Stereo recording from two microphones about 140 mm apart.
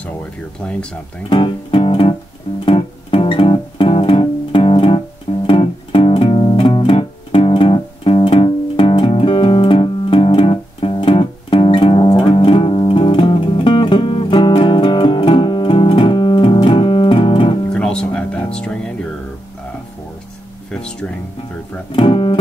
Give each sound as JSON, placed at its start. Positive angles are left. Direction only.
{"t": 1.3, "sound": "guitar", "side_deg": 40}
{"t": 5.5, "sound": "music", "side_deg": 40}
{"t": 17.7, "sound": "music", "side_deg": 5}
{"t": 20.7, "sound": "music", "side_deg": 5}
{"t": 21.9, "sound": "guitar", "side_deg": 35}